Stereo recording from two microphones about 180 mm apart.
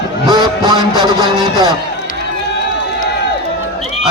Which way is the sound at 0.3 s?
25° right (ahead or behind).